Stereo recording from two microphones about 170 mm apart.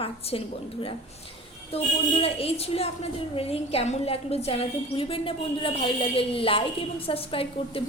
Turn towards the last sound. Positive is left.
turn(degrees=35)  # may be behind; listen again after turning